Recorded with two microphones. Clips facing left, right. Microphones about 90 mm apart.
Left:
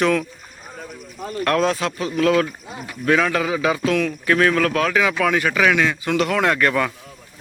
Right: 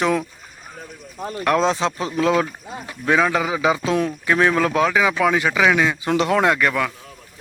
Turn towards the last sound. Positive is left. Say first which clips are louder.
# left 1 dB
turn(degrees=0)  # may be behind; listen again after turning